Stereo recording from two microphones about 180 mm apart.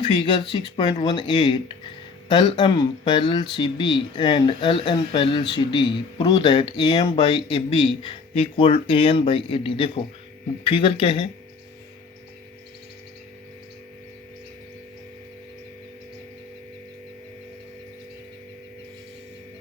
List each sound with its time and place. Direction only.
0.0 s speech: 25° left (ahead or behind)